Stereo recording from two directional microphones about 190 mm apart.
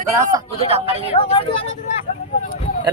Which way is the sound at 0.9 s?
30° left (ahead or behind).